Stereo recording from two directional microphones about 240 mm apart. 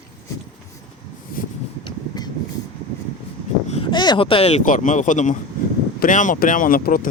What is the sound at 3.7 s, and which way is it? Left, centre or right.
Speech, left.